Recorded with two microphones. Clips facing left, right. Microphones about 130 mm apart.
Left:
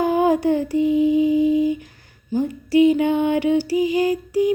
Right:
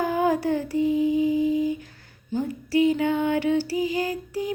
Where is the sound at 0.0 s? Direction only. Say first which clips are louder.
Left 5 dB; 20° left (ahead or behind).